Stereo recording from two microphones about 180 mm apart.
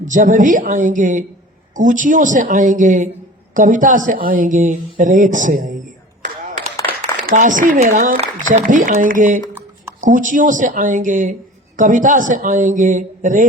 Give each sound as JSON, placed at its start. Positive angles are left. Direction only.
{"t": 0.0, "sound": "speech", "side_deg": -45}
{"t": 7.3, "sound": "speech", "side_deg": -45}